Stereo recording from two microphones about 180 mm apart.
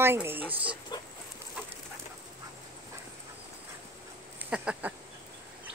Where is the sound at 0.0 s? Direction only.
15° right (ahead or behind).